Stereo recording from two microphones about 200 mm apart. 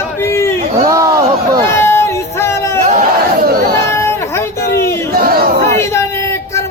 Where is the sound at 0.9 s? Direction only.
15° right (ahead or behind).